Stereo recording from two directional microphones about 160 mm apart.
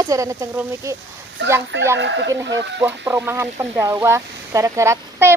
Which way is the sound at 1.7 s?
90° right.